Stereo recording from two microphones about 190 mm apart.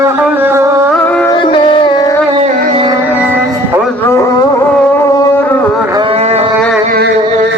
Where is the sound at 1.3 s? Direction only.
25° left (ahead or behind).